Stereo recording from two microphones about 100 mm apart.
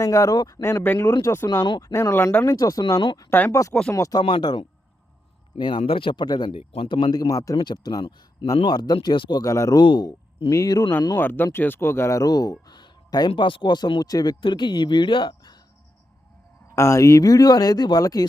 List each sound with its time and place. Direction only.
0.0 s speech: 35° left (ahead or behind)
2.4 s speech: 35° left (ahead or behind)
4.2 s speech: 45° left (ahead or behind)
6.5 s speech: 65° left (ahead or behind); by 7.6 s 35° left (ahead or behind)
7.6 s speech: 45° left (ahead or behind)
9.4 s speech: 35° left (ahead or behind)
9.8 s speech: 45° left (ahead or behind)
11.1 s speech: 20° left (ahead or behind); by 14.3 s 40° left (ahead or behind)
14.4 s a woman's voice: 50° left (ahead or behind)
16.7 s speech: 30° left (ahead or behind)